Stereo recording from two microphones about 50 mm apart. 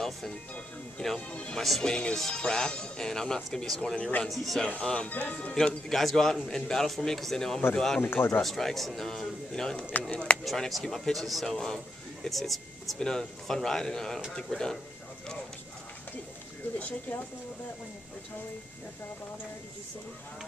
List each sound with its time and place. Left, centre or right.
0.9 s speech: centre
1.3 s speech: left
4.3 s a man's voice: centre
4.8 s speech: centre
5.1 s speech: left
5.9 s speech: centre
8.0 s speech: left
8.4 s speech: centre; by 10.3 s left
10.3 s speech: centre
12.3 s speech: centre
13.0 s speech: centre
16.7 s speech: left